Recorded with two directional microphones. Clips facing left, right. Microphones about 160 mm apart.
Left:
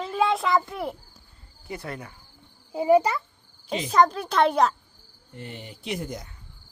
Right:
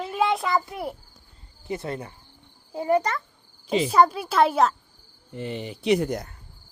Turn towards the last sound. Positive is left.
turn(degrees=-65)  # may be behind; listen again after turning